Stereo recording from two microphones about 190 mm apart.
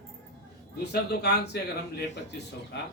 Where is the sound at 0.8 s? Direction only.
60° left (ahead or behind).